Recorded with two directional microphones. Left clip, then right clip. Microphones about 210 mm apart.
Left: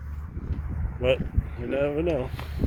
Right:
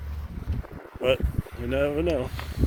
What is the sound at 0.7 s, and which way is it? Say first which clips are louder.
Boat: even; 65° right (ahead or behind).